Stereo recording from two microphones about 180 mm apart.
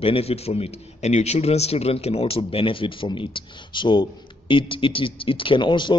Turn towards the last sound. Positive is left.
turn(degrees=25)  # may be behind; listen again after turning